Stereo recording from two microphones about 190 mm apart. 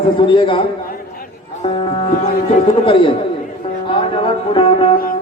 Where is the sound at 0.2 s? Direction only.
25° left (ahead or behind).